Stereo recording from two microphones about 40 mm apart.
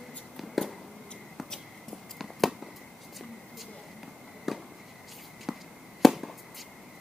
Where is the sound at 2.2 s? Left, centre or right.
Centre.